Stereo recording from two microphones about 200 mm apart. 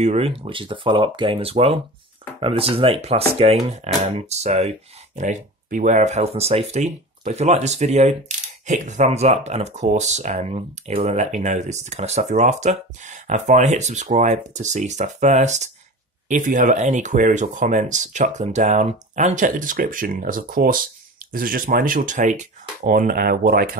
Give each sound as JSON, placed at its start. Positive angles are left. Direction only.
{"t": 0.0, "sound": "speech", "side_deg": -30}